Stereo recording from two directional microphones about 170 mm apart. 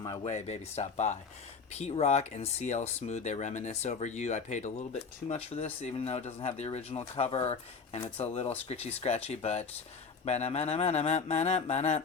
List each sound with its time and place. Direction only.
0.3 s speech: 40° left (ahead or behind)